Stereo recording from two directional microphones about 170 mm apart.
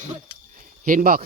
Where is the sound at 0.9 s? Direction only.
55° right (ahead or behind).